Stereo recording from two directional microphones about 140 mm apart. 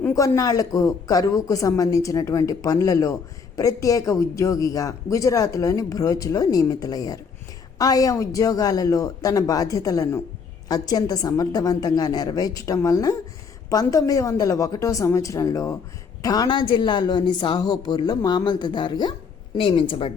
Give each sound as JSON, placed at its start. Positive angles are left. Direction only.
{"t": 0.1, "sound": "a woman's voice", "side_deg": 25}